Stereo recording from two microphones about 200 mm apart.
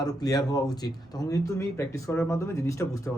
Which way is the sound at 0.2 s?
20° left (ahead or behind).